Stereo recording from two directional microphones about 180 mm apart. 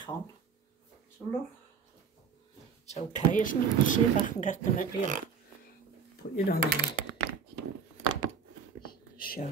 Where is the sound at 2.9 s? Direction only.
40° left (ahead or behind).